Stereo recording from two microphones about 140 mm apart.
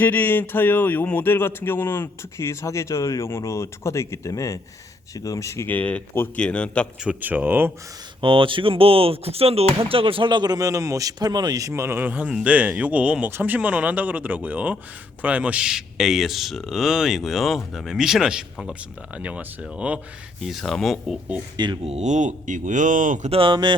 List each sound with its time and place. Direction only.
0.0 s speech: 15° left (ahead or behind)
7.0 s speech: 10° right (ahead or behind)
8.2 s speech: 40° right (ahead or behind); by 21.2 s centre (ahead or behind)
21.5 s speech: 30° right (ahead or behind)
21.8 s speech: 50° right (ahead or behind)
23.3 s speech: 40° right (ahead or behind)